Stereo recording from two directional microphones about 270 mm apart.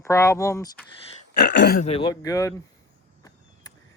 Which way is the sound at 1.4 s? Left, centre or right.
Left.